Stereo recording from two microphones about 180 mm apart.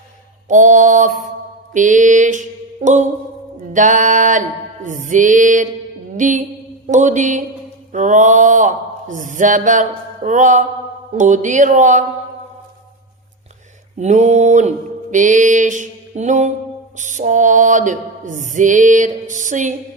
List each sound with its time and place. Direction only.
0.4 s music: 45° right (ahead or behind)
14.0 s mantra: 40° right (ahead or behind)
15.1 s music: 45° right (ahead or behind)